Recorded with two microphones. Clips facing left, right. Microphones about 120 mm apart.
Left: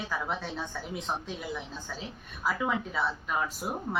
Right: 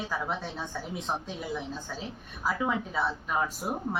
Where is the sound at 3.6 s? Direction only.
30° right (ahead or behind).